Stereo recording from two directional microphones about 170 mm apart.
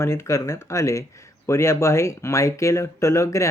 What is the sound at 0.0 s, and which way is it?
Speech, 15° left (ahead or behind).